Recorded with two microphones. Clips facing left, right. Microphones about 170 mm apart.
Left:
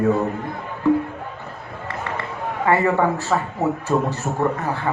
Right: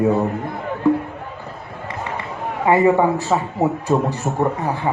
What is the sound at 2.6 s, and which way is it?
A man's voice, 15° right (ahead or behind).